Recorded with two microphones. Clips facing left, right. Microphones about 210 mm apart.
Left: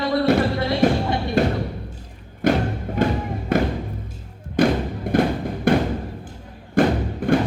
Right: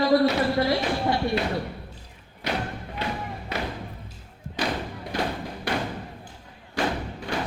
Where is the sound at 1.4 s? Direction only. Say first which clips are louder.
Left 7 dB; 45° left (ahead or behind).